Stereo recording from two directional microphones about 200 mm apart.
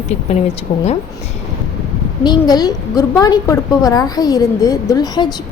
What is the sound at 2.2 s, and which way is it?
A woman's voice, 20° left (ahead or behind).